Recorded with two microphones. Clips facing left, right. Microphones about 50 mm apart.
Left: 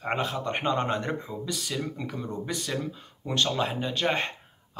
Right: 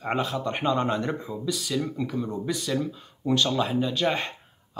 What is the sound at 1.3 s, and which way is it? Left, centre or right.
Speech, centre.